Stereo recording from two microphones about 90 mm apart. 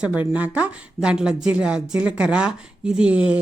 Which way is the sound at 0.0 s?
15° right (ahead or behind).